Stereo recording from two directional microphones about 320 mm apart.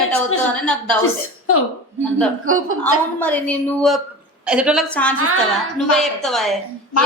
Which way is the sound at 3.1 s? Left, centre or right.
Centre.